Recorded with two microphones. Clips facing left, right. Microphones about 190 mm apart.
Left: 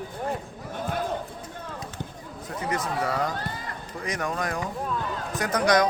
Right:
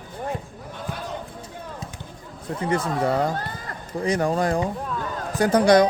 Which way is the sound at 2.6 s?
30° right (ahead or behind).